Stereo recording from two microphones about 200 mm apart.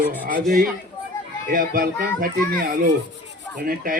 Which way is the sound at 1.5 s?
45° right (ahead or behind).